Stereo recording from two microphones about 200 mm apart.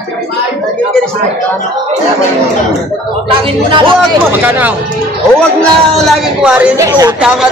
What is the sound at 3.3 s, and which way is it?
Speech, 25° right (ahead or behind).